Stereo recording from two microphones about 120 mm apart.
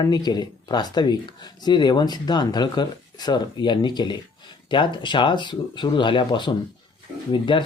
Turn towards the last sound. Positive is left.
turn(degrees=40)  # may be behind; listen again after turning